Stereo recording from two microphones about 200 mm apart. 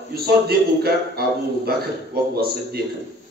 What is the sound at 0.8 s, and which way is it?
Speech, 50° right (ahead or behind).